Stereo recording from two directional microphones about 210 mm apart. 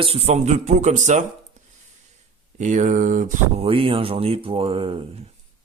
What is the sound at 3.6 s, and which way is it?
A man's voice, 25° right (ahead or behind).